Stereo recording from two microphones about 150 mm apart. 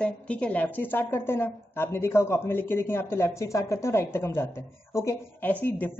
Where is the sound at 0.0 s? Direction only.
10° left (ahead or behind).